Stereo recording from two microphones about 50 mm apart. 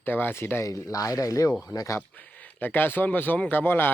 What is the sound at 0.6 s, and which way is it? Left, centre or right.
Speech, left.